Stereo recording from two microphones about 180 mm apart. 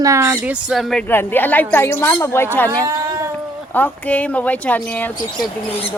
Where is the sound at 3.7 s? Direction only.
10° left (ahead or behind).